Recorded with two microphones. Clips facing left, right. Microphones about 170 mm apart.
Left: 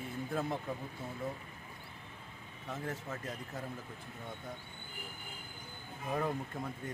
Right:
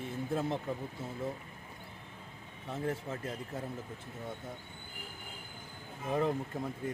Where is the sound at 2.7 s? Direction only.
30° right (ahead or behind).